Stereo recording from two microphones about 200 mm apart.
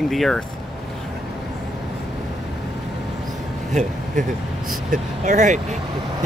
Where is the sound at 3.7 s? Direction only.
35° right (ahead or behind).